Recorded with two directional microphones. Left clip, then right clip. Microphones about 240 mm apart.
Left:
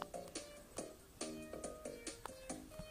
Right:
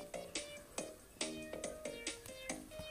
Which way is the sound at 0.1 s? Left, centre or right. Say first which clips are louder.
Right 4 dB; right.